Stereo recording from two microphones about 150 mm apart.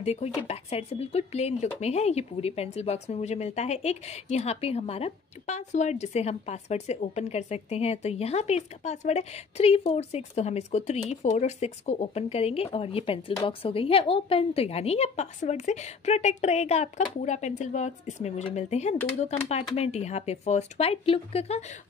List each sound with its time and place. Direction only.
0.0 s speech: 45° left (ahead or behind)